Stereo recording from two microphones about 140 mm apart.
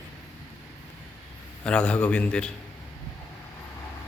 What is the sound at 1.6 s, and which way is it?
Speech, 10° left (ahead or behind).